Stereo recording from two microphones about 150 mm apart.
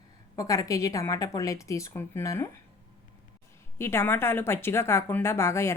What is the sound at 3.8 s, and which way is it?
Speech, 15° left (ahead or behind).